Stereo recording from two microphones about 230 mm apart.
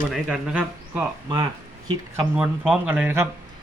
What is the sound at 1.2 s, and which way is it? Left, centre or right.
Speech, centre.